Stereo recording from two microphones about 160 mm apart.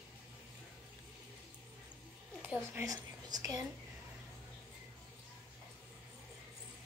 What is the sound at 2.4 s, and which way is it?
A woman's voice, 10° right (ahead or behind).